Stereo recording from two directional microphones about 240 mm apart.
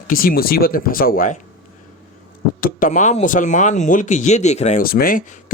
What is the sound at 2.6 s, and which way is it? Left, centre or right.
Speech, left.